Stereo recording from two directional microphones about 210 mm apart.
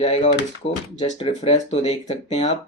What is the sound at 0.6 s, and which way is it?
Speech, 60° left (ahead or behind).